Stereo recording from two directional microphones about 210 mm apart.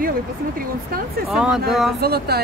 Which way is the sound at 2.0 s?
50° right (ahead or behind).